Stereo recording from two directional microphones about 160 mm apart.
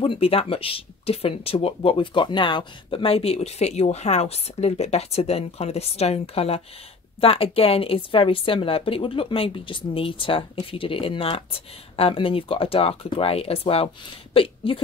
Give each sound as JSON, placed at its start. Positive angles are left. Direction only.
{"t": 0.0, "sound": "speech", "side_deg": 35}